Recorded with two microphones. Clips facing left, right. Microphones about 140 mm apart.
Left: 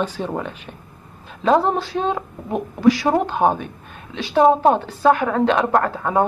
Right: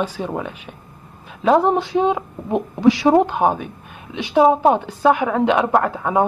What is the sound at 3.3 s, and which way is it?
Speech, 10° right (ahead or behind).